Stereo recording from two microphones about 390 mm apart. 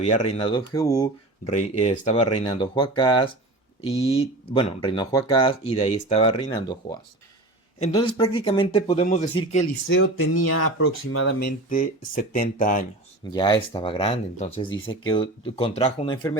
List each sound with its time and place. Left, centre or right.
0.0 s speech: centre
9.8 s speech: left; by 16.4 s centre